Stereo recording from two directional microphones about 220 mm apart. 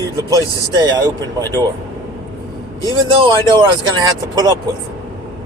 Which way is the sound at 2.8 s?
20° right (ahead or behind).